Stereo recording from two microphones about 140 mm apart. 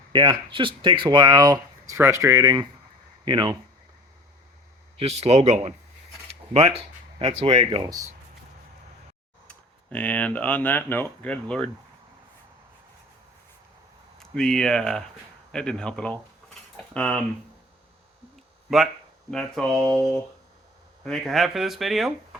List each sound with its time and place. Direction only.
0.1 s speech: 35° right (ahead or behind)
4.9 s speech: 50° right (ahead or behind)
9.5 s speech: 10° left (ahead or behind)
14.2 s speech: 5° left (ahead or behind)
18.7 s speech: centre (ahead or behind)